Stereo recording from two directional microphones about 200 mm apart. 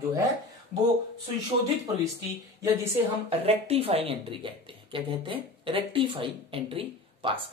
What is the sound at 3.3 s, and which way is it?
Speech, 30° right (ahead or behind).